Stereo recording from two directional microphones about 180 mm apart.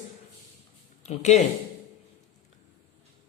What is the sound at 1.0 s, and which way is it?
Speech, 40° left (ahead or behind).